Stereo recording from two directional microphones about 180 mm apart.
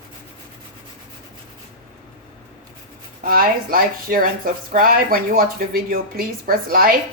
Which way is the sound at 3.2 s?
55° right (ahead or behind).